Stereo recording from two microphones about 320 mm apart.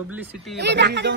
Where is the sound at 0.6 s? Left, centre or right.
Right.